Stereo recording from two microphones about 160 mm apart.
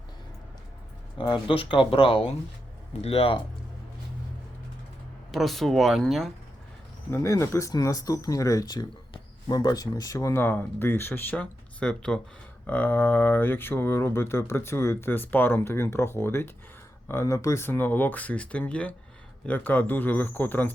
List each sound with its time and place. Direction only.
1.2 s speech: 30° left (ahead or behind)
5.3 s speech: centre (ahead or behind)
7.1 s speech: 15° left (ahead or behind)